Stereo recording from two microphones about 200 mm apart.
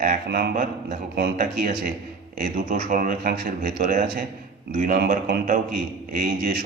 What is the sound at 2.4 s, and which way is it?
A man's voice, 40° right (ahead or behind).